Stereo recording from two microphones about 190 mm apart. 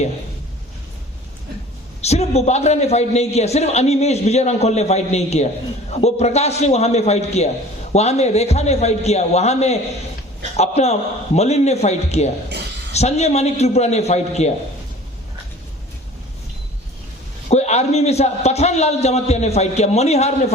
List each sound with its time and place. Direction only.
2.0 s a man's voice: 35° left (ahead or behind)
17.5 s a man's voice: 35° left (ahead or behind)